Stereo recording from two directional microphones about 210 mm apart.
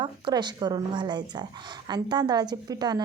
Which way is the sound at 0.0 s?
20° right (ahead or behind).